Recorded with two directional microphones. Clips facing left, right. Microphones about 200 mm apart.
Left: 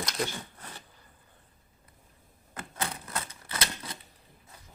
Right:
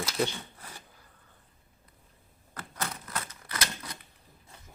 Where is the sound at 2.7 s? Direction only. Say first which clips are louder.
Left 1 dB; 25° left (ahead or behind).